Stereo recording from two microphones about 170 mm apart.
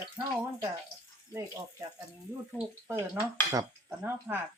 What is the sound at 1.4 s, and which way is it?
Speech, 20° right (ahead or behind).